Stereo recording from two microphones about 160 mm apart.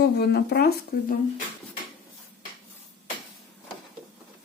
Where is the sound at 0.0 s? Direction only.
90° left.